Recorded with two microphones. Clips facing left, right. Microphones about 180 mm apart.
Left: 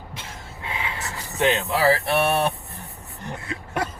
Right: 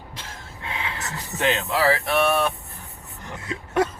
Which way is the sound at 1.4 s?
20° left (ahead or behind).